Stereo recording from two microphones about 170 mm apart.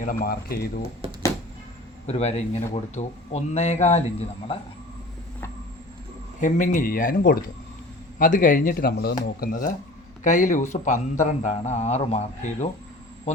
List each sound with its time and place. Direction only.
0.0 s speech: 55° left (ahead or behind)
1.0 s a sound: 35° right (ahead or behind)
2.0 s speech: 40° left (ahead or behind)
6.4 s speech: 50° left (ahead or behind); by 9.1 s 70° left (ahead or behind)
9.4 s speech: 55° left (ahead or behind)
10.2 s a man's voice: 45° left (ahead or behind)